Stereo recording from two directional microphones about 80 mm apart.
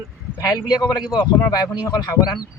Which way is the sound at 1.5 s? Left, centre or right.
Left.